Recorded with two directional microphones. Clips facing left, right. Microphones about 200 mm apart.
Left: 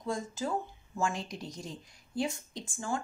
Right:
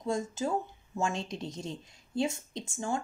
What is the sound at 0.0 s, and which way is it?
Speech, 25° right (ahead or behind).